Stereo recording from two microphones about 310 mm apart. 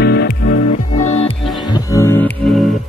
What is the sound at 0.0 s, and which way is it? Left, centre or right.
Music, left.